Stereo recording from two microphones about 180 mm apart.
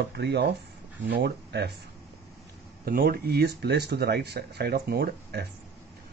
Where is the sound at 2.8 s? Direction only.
55° right (ahead or behind).